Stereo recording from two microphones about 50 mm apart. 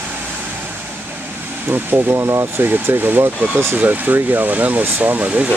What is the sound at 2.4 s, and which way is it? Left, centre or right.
Speech, right.